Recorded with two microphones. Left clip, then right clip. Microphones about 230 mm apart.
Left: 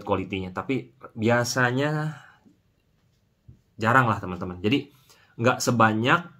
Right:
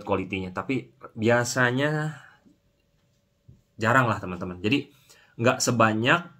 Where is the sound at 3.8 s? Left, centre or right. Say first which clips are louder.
Left 1 dB; centre.